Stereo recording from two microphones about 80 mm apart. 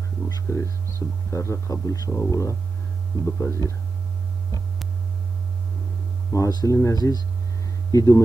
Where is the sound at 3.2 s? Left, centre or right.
Left.